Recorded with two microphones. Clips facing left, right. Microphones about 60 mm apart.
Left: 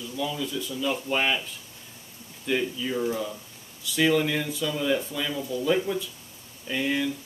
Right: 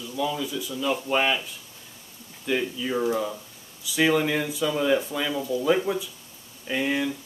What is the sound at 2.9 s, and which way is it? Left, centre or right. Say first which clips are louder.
Speech: right 5 dB; right.